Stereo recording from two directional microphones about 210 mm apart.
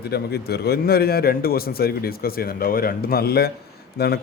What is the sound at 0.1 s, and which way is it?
Speech, 50° left (ahead or behind).